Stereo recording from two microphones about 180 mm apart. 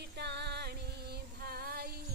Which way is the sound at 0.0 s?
65° right (ahead or behind).